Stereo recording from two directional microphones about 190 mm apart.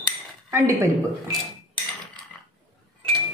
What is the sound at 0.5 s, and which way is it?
Speech, 15° right (ahead or behind).